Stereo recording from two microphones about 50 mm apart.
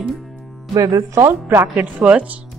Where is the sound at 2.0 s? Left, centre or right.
Right.